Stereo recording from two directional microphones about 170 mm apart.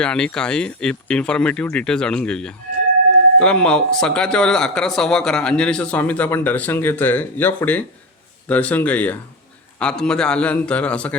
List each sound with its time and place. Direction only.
0.0 s a man's voice: 5° left (ahead or behind)